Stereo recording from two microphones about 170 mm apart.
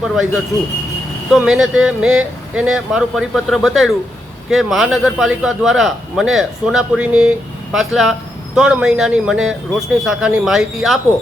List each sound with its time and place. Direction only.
1.3 s a man's voice: 5° right (ahead or behind)